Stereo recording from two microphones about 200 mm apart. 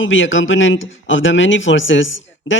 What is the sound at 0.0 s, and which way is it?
A man's voice, 75° left (ahead or behind).